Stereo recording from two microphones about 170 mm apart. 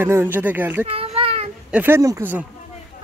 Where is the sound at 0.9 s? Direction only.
35° right (ahead or behind).